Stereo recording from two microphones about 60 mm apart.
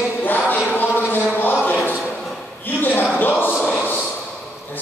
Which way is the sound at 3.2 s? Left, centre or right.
Left.